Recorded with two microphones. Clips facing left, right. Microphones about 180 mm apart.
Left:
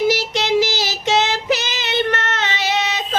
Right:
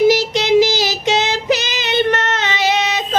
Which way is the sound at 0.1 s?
15° right (ahead or behind).